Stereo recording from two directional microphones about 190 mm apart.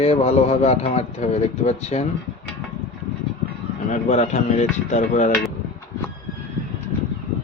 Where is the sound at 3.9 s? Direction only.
35° left (ahead or behind).